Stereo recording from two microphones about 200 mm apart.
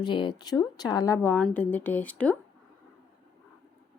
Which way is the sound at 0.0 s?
25° left (ahead or behind).